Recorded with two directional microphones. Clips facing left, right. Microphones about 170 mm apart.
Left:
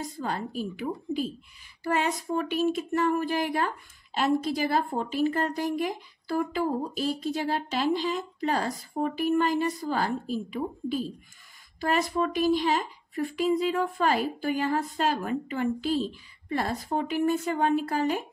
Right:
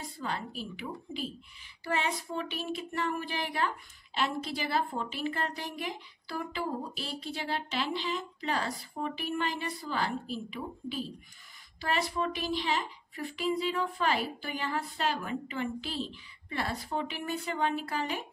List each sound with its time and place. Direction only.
0.2 s speech: 45° left (ahead or behind)